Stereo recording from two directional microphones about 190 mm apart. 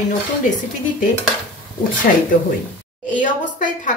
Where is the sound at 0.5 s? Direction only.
45° left (ahead or behind).